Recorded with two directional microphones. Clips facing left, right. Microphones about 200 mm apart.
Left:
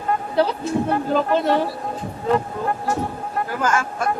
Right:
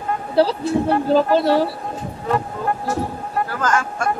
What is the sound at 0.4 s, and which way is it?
Speech, 35° right (ahead or behind).